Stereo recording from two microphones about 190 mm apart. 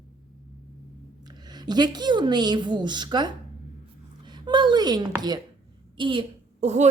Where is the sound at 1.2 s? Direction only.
20° right (ahead or behind).